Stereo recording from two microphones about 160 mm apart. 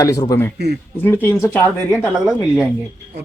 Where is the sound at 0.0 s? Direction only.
20° left (ahead or behind).